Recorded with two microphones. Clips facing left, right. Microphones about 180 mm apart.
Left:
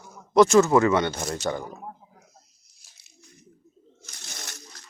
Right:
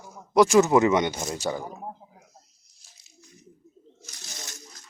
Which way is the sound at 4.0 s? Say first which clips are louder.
Left 1 dB; 60° left (ahead or behind).